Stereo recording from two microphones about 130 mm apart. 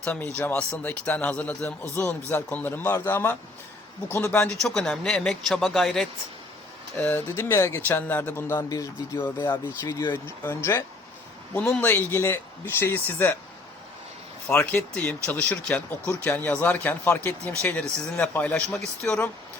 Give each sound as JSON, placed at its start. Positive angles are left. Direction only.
{"t": 0.0, "sound": "speech", "side_deg": 10}
{"t": 6.9, "sound": "speech", "side_deg": 15}
{"t": 14.4, "sound": "speech", "side_deg": 10}